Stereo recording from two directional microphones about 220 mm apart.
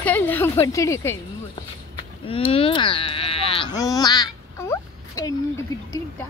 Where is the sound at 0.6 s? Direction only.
15° left (ahead or behind).